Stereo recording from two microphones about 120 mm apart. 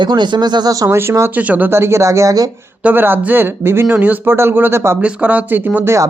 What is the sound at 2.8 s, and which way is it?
Speech, 15° right (ahead or behind).